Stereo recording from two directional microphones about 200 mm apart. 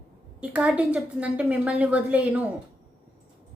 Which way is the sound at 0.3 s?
5° right (ahead or behind).